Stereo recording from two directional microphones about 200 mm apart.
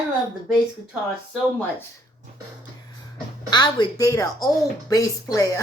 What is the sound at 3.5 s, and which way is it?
Speech, 20° left (ahead or behind).